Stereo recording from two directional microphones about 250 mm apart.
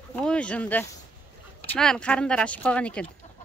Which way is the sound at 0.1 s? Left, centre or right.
Centre.